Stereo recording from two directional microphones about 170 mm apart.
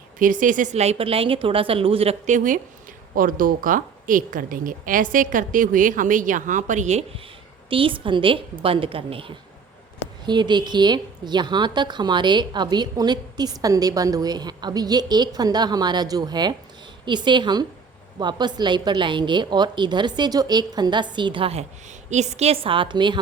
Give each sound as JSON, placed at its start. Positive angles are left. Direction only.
{"t": 0.2, "sound": "a woman's voice", "side_deg": -50}
{"t": 7.7, "sound": "a woman's voice", "side_deg": -30}